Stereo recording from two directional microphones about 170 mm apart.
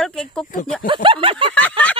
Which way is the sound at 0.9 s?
30° right (ahead or behind).